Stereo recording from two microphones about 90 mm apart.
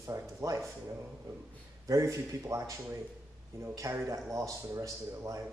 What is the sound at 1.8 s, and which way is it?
Speech, 35° right (ahead or behind).